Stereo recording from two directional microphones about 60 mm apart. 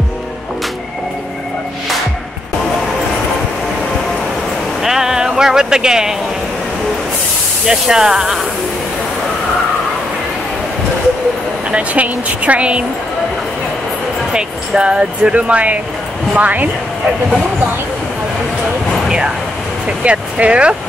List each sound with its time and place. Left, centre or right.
4.8 s a sound: centre
7.6 s speech: centre
11.7 s speech: right
14.3 s speech: centre
19.0 s vehicle: centre
20.0 s speech: right